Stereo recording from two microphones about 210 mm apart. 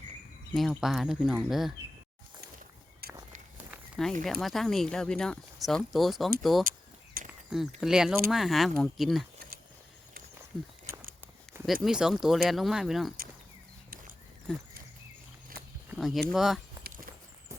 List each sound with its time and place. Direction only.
0.5 s speech: centre (ahead or behind)
3.0 s walk: 45° right (ahead or behind)
3.7 s walk: centre (ahead or behind)
4.2 s speech: centre (ahead or behind)
6.7 s a sound: 40° right (ahead or behind)
7.3 s a sound: centre (ahead or behind)
7.8 s speech: 5° right (ahead or behind)
11.6 s speech: centre (ahead or behind)
15.9 s speech: centre (ahead or behind)
16.8 s walk: 20° right (ahead or behind)